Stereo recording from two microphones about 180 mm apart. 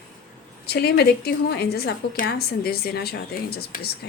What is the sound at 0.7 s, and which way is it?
A woman's voice, 65° left (ahead or behind).